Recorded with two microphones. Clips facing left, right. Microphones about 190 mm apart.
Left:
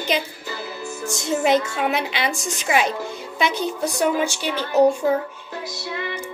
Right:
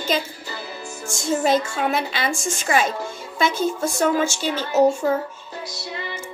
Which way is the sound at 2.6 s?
15° left (ahead or behind).